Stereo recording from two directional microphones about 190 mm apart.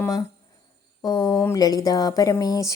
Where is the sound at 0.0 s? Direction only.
20° left (ahead or behind).